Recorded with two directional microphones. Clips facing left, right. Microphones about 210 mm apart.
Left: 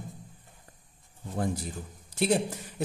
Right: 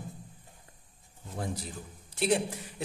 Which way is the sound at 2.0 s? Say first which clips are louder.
Left 2 dB; 40° left (ahead or behind).